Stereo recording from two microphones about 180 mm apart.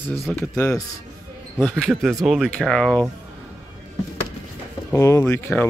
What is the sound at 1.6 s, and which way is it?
Speech, 5° left (ahead or behind).